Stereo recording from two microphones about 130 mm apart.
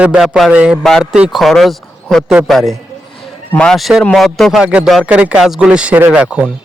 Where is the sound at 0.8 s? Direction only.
5° left (ahead or behind).